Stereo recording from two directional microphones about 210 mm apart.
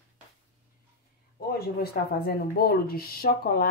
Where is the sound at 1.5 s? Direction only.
45° left (ahead or behind).